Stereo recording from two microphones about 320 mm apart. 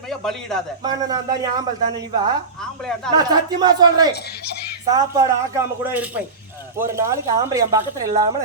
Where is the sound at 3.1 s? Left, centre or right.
Centre.